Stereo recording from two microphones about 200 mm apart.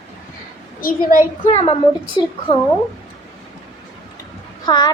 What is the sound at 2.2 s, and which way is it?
Speech, 20° left (ahead or behind).